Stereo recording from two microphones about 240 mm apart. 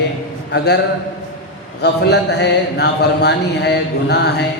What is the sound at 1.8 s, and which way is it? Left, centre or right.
Speech, left.